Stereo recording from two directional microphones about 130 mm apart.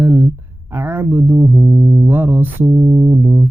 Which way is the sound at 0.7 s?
15° right (ahead or behind).